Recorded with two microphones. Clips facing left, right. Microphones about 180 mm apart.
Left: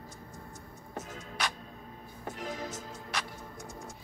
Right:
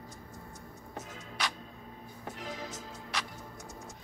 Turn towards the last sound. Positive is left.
turn(degrees=50)  # may be behind; listen again after turning